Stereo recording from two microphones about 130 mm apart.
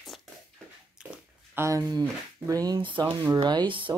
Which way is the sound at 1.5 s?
25° right (ahead or behind).